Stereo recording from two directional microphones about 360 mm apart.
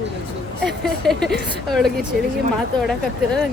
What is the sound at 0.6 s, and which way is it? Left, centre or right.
Speech, centre.